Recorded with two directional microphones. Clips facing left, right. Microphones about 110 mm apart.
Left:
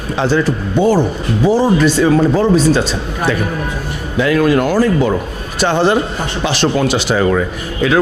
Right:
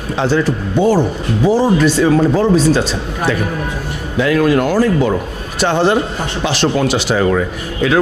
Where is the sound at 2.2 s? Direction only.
25° left (ahead or behind).